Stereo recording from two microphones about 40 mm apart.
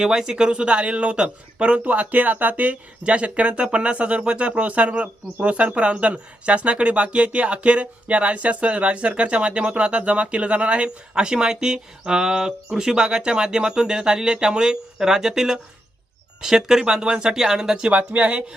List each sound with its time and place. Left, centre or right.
0.0 s speech: centre
1.8 s speech: right; by 17.8 s centre
17.8 s speech: right